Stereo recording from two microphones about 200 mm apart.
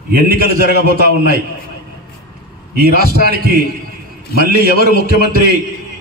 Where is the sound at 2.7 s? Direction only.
50° right (ahead or behind).